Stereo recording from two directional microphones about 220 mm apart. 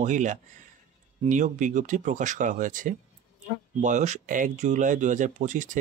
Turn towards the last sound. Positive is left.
turn(degrees=-35)  # may be behind; listen again after turning